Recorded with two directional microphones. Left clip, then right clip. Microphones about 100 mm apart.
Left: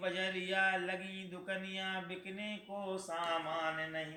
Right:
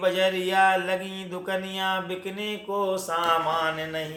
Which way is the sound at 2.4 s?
65° right (ahead or behind).